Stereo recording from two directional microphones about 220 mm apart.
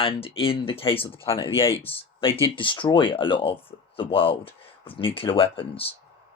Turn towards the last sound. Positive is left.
turn(degrees=25)  # may be behind; listen again after turning